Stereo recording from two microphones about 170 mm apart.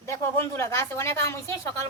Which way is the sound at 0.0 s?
15° left (ahead or behind).